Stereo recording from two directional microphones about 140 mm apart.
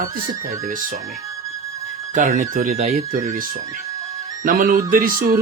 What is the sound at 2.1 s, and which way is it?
A man's voice, 65° right (ahead or behind).